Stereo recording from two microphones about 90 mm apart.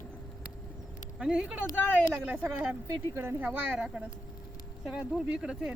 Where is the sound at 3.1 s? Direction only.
25° right (ahead or behind); by 5.7 s 10° right (ahead or behind).